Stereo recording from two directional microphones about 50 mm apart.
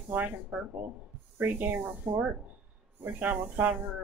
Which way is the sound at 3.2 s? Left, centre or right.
Right.